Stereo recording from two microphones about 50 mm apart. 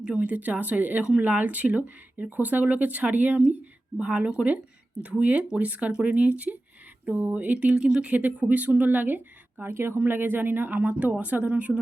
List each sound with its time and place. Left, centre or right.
0.0 s speech: right
4.0 s speech: right
8.1 s speech: right